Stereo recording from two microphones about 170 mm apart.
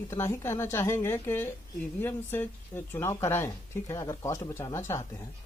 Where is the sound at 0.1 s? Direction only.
15° left (ahead or behind).